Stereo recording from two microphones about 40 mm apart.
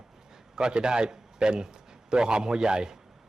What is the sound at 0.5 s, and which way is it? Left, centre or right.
A man's voice, centre.